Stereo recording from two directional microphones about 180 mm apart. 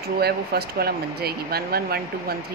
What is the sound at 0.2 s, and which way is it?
Speech, 60° right (ahead or behind).